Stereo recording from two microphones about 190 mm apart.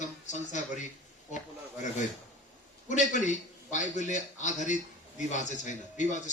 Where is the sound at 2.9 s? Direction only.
40° left (ahead or behind).